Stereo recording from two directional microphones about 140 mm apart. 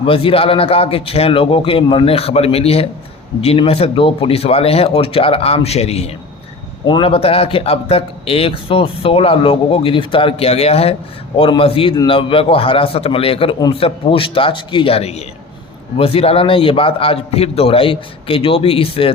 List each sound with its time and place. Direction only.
0.0 s speech: 40° left (ahead or behind)
6.8 s a man's voice: 35° left (ahead or behind)